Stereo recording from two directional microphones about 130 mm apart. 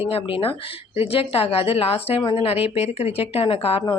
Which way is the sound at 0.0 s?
45° left (ahead or behind).